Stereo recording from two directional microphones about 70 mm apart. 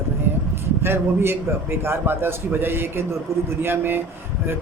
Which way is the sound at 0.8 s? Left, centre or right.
Right.